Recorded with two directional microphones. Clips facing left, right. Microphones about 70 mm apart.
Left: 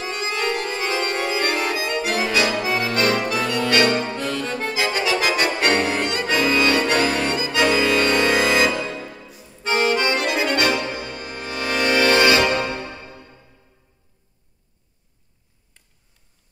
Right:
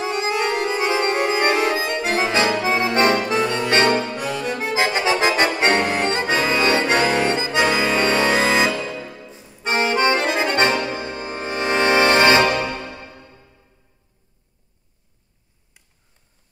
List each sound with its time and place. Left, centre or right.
0.0 s music: right
4.7 s accordion: right
9.7 s accordion: right